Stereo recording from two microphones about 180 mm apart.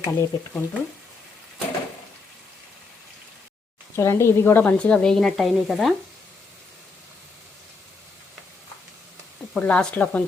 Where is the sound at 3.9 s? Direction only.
15° left (ahead or behind); by 5.9 s centre (ahead or behind).